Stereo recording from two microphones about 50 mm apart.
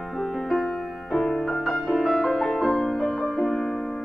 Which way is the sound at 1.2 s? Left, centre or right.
Centre.